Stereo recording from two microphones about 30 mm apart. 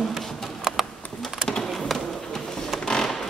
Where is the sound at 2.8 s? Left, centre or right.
Left.